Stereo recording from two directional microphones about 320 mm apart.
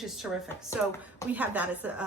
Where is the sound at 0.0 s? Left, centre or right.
Centre.